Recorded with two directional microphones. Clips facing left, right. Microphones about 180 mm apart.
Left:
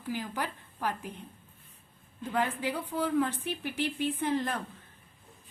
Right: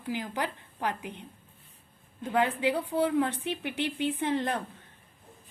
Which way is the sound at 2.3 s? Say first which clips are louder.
Right 4 dB; 20° right (ahead or behind).